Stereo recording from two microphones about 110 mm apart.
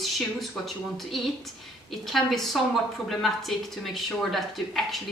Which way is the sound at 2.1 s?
5° left (ahead or behind).